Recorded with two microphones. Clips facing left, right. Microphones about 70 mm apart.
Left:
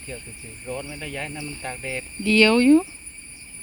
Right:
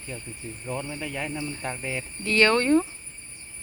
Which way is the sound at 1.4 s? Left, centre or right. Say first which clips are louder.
Right 1 dB; right.